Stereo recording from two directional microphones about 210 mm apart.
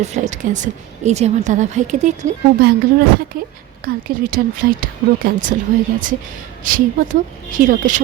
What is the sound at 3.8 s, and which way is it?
A woman's voice, 45° right (ahead or behind).